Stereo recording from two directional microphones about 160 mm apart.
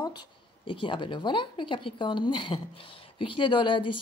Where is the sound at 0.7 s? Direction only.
30° left (ahead or behind).